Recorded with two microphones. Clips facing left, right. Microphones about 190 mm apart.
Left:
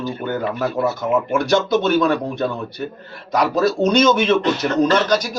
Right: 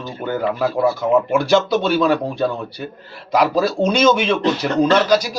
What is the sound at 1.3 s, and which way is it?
Speech, 10° right (ahead or behind).